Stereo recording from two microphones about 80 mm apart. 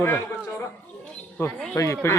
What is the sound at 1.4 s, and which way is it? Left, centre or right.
Speech, left.